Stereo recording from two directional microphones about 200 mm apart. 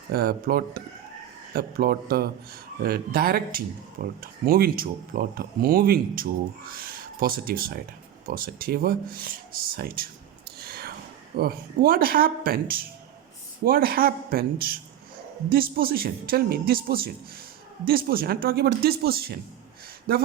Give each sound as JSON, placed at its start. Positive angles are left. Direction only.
{"t": 0.1, "sound": "speech", "side_deg": -50}
{"t": 10.6, "sound": "a sound", "side_deg": -50}
{"t": 11.3, "sound": "speech", "side_deg": -50}